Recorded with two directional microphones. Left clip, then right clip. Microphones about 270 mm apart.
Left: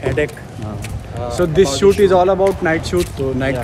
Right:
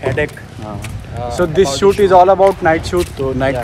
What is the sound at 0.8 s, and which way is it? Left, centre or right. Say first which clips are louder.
A man's voice: right 1 dB; centre.